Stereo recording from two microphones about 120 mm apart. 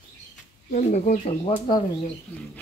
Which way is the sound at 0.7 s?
80° left.